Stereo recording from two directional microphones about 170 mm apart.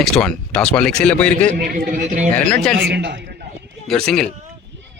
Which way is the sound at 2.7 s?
80° right.